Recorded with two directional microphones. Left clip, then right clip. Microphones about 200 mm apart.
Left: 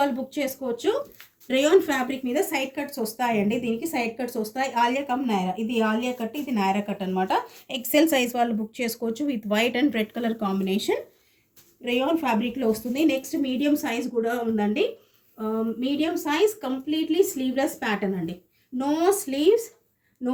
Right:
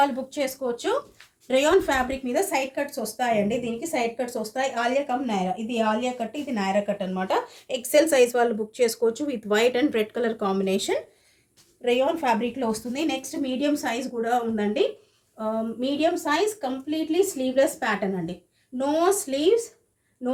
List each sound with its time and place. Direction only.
0.0 s a woman's voice: 40° right (ahead or behind)
11.9 s a woman's voice: 35° right (ahead or behind)